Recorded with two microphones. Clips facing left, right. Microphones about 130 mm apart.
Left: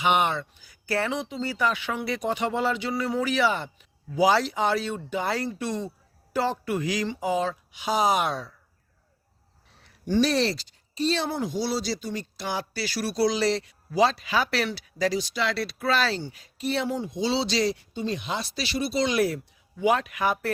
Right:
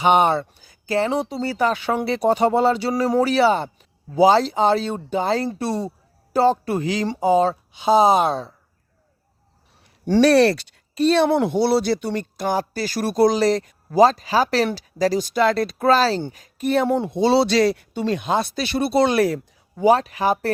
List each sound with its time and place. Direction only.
0.0 s speech: 35° right (ahead or behind)
1.1 s speech: 35° right (ahead or behind)
10.1 s speech: 65° right (ahead or behind)
19.7 s speech: 35° right (ahead or behind)